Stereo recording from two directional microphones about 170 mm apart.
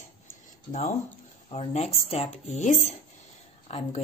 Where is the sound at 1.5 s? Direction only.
40° left (ahead or behind).